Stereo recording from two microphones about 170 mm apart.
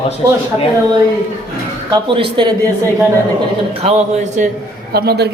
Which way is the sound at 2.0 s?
30° right (ahead or behind).